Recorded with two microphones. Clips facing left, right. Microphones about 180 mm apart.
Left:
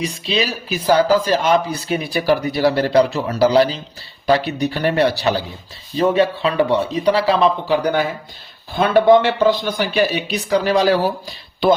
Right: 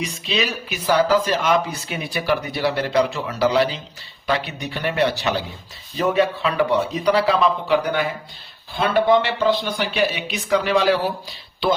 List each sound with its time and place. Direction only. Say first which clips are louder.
0.0 s speech: left 3 dB; 30° left (ahead or behind)